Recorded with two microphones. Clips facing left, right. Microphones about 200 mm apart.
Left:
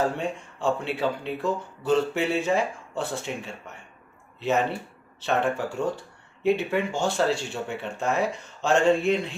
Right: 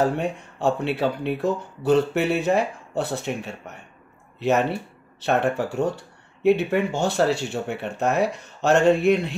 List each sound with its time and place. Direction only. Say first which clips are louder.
0.0 s speech: right 4 dB; 65° right (ahead or behind)